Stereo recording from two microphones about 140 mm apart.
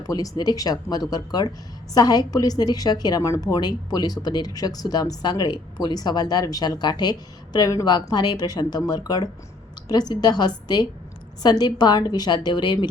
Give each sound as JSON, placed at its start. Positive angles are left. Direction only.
{"t": 0.1, "sound": "a woman's voice", "side_deg": 25}